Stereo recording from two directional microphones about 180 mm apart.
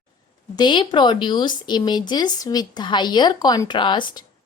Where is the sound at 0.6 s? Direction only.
25° left (ahead or behind).